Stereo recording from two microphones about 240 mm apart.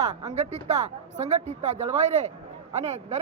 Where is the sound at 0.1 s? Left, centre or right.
Centre.